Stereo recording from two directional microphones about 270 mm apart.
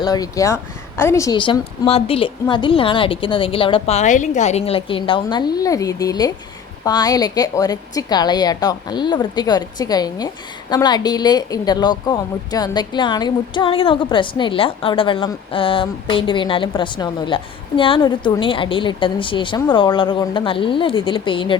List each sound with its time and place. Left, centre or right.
0.0 s a woman's voice: centre